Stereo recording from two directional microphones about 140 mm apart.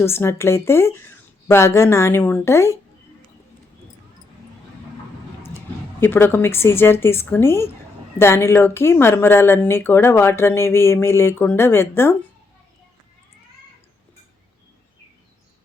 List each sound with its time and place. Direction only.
0.0 s speech: 20° left (ahead or behind)
6.0 s speech: 15° left (ahead or behind)